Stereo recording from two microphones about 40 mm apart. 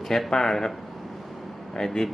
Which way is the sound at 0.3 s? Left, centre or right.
Centre.